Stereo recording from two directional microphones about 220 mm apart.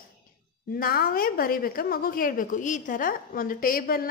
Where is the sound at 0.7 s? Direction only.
40° left (ahead or behind).